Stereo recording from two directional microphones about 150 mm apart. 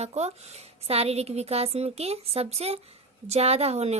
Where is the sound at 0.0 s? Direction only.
45° right (ahead or behind).